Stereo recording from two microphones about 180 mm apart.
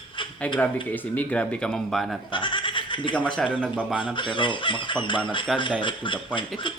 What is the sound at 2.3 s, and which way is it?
Goat, 25° left (ahead or behind).